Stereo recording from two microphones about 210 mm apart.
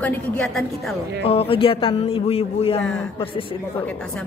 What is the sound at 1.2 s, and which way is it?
Speech, 25° left (ahead or behind).